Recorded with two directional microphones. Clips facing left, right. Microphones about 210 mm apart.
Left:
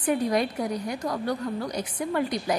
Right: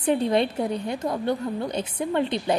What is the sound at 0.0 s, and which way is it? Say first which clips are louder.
A woman's voice: right 3 dB; 25° right (ahead or behind).